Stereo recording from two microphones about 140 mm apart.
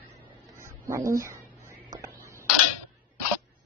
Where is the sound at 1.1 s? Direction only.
20° right (ahead or behind).